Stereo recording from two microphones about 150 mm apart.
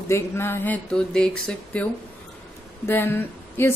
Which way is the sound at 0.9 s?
5° left (ahead or behind).